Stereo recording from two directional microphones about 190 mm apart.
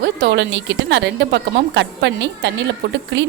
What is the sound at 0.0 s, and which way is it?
Speech, 70° right (ahead or behind).